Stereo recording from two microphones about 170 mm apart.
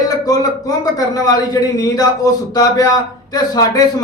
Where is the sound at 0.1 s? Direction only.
25° left (ahead or behind).